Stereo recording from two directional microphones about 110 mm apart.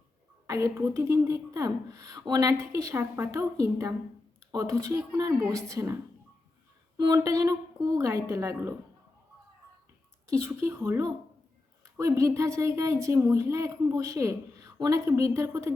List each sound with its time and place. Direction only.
0.4 s a woman's voice: 30° right (ahead or behind)
10.2 s speech: 25° right (ahead or behind)